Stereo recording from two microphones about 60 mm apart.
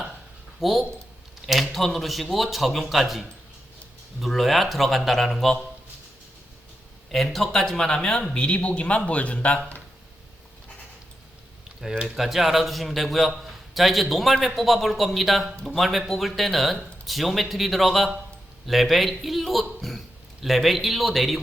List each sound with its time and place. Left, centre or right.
0.6 s a man's voice: centre
7.1 s speech: centre; by 9.8 s left
12.0 s a man's voice: centre